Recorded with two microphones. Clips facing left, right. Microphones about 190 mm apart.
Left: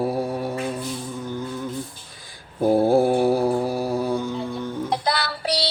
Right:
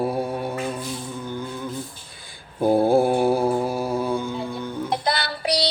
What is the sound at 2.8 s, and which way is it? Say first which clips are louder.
Mantra: left 1 dB; 35° left (ahead or behind).